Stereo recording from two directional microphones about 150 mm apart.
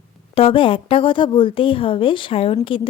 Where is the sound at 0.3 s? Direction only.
35° left (ahead or behind).